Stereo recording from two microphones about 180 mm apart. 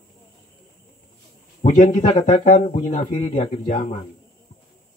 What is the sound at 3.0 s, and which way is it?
Speech, 30° left (ahead or behind).